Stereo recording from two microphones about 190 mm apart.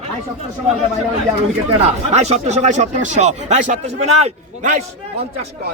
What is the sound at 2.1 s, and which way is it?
Speech, 35° right (ahead or behind).